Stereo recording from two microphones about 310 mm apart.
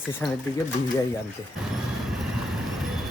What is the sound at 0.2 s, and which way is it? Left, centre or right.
Speech, centre.